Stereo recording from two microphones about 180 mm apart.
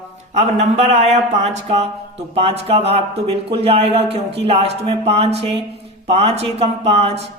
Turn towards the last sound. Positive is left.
turn(degrees=-35)  # may be behind; listen again after turning